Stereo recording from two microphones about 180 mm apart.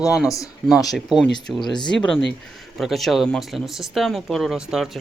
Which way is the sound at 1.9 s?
5° left (ahead or behind).